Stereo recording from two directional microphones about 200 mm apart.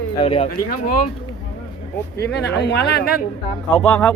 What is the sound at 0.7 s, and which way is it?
Speech, 45° left (ahead or behind).